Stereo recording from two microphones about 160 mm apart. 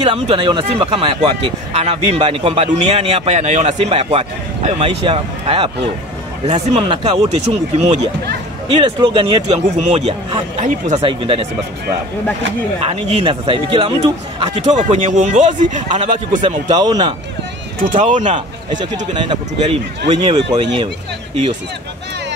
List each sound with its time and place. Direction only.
0.0 s speech: 30° right (ahead or behind)
6.4 s speech: 45° right (ahead or behind)
12.8 s speech: 40° right (ahead or behind)
14.6 s speech: 45° right (ahead or behind)
16.4 s speech: 25° right (ahead or behind)
18.1 s speech: 50° right (ahead or behind)
19.1 s speech: 30° right (ahead or behind)